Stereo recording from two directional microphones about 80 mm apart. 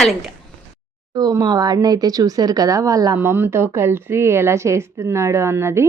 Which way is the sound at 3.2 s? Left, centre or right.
Right.